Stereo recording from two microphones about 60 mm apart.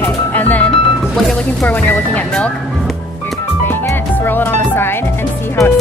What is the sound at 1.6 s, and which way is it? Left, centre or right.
Speech, left.